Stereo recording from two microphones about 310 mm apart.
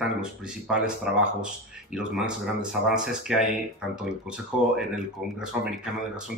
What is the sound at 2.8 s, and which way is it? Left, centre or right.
Speech, centre.